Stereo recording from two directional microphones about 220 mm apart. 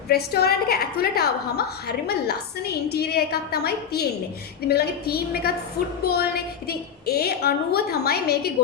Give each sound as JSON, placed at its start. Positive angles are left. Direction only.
{"t": 0.1, "sound": "a woman's voice", "side_deg": 45}